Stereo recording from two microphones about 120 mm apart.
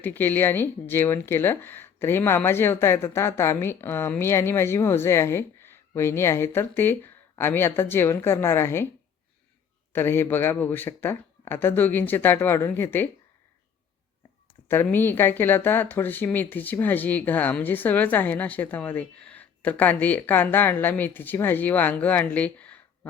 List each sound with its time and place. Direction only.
0.0 s speech: 15° left (ahead or behind)
9.9 s speech: 20° left (ahead or behind)
14.7 s speech: 20° left (ahead or behind)